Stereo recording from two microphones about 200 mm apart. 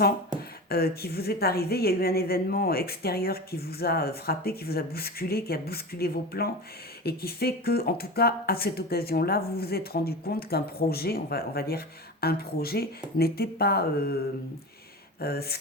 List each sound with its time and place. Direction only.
0.7 s speech: 50° left (ahead or behind)
15.2 s speech: 50° left (ahead or behind)